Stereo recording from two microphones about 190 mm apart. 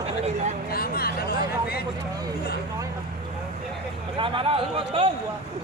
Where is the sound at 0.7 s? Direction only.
50° left (ahead or behind).